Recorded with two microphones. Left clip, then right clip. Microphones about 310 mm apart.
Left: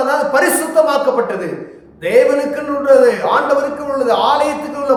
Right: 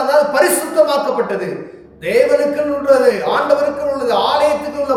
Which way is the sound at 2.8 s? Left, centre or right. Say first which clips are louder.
Left 3 dB; centre.